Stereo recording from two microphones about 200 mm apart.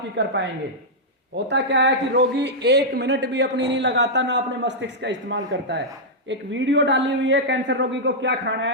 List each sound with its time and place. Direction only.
0.2 s a man's voice: 60° right (ahead or behind)
1.5 s a man's voice: 60° right (ahead or behind)